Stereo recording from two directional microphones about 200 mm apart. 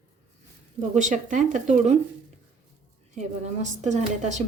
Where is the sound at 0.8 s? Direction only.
35° right (ahead or behind).